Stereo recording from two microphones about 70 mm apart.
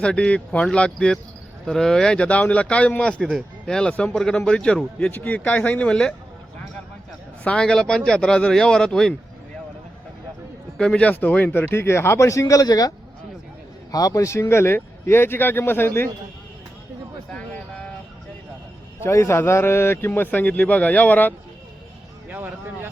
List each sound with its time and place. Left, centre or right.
0.0 s a man's voice: centre
3.2 s a man's voice: centre
7.4 s a man's voice: centre
10.8 s a man's voice: centre
11.1 s speech: left
13.9 s speech: left
19.0 s speech: left
22.3 s vehicle: right